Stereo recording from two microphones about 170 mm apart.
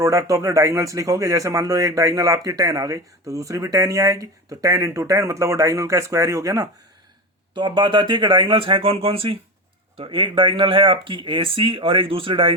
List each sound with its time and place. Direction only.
0.0 s speech: 20° right (ahead or behind)